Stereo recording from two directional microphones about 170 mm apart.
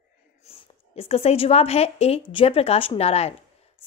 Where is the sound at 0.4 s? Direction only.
35° left (ahead or behind).